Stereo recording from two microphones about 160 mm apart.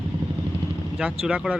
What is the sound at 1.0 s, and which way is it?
Speech, 5° right (ahead or behind).